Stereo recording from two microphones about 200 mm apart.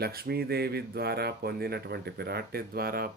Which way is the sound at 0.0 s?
50° right (ahead or behind).